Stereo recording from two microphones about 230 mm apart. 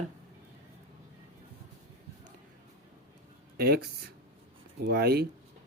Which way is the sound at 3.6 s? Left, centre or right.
Right.